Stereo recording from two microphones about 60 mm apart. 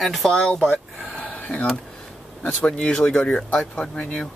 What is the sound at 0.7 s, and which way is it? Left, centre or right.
Speech, left.